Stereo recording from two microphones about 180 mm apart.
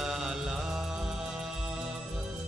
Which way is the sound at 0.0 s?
5° right (ahead or behind).